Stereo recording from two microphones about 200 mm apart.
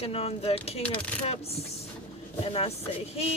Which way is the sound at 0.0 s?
30° left (ahead or behind).